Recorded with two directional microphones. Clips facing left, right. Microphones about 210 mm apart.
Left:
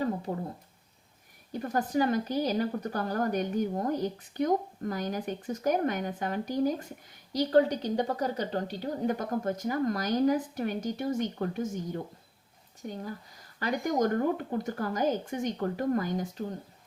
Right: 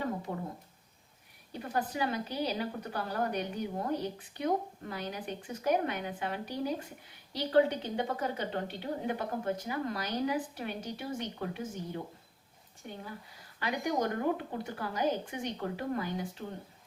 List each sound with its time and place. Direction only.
0.0 s a sound: 35° left (ahead or behind)
1.5 s a woman's voice: 45° left (ahead or behind)
12.9 s a woman's voice: 40° left (ahead or behind)